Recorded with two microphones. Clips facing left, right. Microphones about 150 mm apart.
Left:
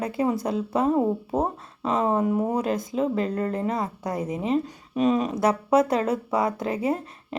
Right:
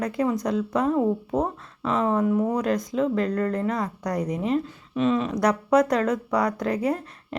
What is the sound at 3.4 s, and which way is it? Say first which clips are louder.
Speech: right 2 dB; 15° left (ahead or behind).